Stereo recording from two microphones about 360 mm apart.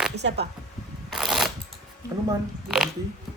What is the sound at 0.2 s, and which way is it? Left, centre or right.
Speech, right.